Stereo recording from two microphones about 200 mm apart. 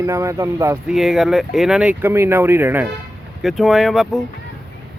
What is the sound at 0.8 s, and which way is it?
Speech, centre (ahead or behind).